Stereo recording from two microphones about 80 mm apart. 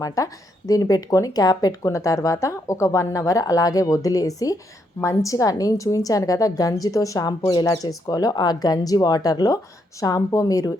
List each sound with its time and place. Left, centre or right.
0.7 s speech: left